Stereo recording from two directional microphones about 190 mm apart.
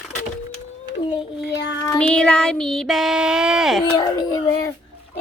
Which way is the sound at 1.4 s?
65° left (ahead or behind).